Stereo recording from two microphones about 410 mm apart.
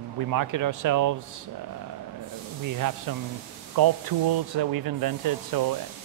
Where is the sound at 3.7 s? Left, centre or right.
Right.